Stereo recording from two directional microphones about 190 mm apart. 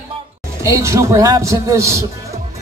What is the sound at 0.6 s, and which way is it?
A man's voice, 15° right (ahead or behind).